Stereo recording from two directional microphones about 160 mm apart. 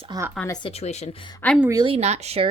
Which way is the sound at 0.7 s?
40° left (ahead or behind).